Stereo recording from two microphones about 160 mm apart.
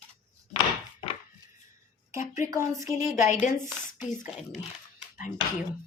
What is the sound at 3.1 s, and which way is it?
Speech, 50° left (ahead or behind).